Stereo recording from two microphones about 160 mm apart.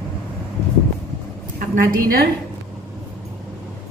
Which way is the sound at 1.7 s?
65° right (ahead or behind).